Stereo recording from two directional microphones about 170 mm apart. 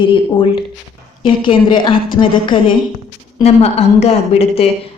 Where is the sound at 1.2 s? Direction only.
30° left (ahead or behind).